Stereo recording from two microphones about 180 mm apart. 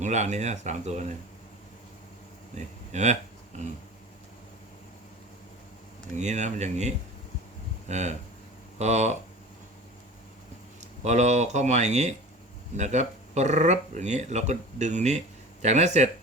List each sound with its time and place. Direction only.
0.0 s speech: 40° right (ahead or behind)
2.6 s speech: 40° right (ahead or behind)
6.1 s speech: 40° right (ahead or behind)
11.0 s speech: 40° right (ahead or behind)